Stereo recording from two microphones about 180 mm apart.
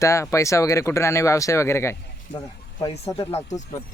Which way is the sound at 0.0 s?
15° left (ahead or behind).